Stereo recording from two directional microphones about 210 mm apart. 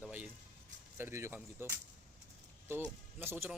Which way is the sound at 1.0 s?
10° right (ahead or behind).